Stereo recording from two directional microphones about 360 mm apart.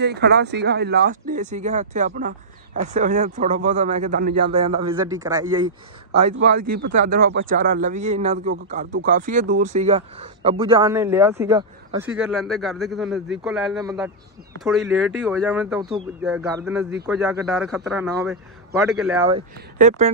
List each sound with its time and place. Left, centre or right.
0.0 s a man's voice: right; by 5.7 s centre
7.0 s a man's voice: right; by 19.4 s centre
19.8 s speech: centre